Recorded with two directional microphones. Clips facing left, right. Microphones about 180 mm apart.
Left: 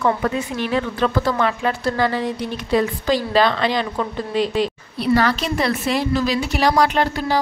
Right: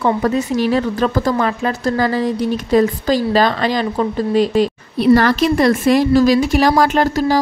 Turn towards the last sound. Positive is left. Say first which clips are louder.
# right 4 dB
turn(degrees=-45)  # may be behind; listen again after turning